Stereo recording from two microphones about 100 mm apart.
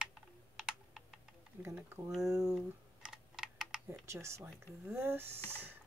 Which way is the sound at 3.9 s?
25° right (ahead or behind).